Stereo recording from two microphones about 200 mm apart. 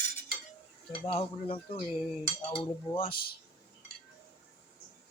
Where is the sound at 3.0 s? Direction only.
50° left (ahead or behind).